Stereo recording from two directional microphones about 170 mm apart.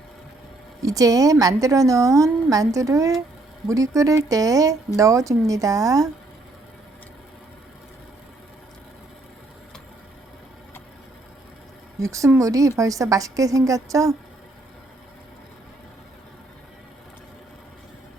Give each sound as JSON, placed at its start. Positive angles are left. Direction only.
{"t": 0.8, "sound": "a woman's voice", "side_deg": -20}
{"t": 11.9, "sound": "a woman's voice", "side_deg": -20}